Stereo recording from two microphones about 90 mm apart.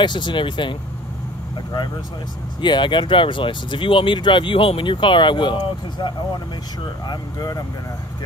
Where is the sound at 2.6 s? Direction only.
60° left (ahead or behind).